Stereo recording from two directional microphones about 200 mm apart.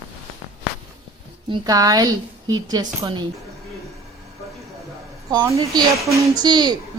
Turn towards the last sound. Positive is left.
turn(degrees=-20)  # may be behind; listen again after turning